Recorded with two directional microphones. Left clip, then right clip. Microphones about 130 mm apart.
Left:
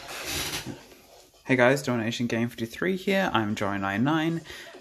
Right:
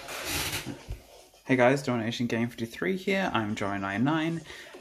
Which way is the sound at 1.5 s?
25° left (ahead or behind).